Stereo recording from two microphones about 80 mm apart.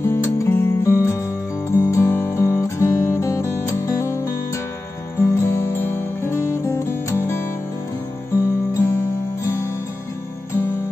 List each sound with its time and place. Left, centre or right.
0.0 s music: left
8.5 s music: left